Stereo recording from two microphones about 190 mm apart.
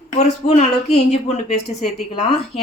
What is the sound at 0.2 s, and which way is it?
A woman's voice, 35° left (ahead or behind).